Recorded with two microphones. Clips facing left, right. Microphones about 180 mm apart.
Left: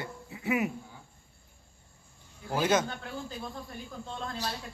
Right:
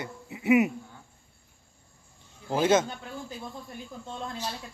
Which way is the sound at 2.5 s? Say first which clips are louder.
Right 4 dB; 25° right (ahead or behind).